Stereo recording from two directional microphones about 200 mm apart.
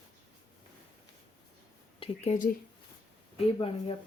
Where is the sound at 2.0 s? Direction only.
35° left (ahead or behind).